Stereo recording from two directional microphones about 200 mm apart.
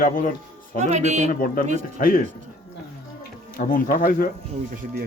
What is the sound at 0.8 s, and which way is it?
Speech, 35° right (ahead or behind).